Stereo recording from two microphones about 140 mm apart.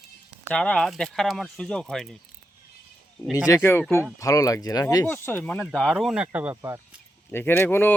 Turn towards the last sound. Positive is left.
turn(degrees=15)  # may be behind; listen again after turning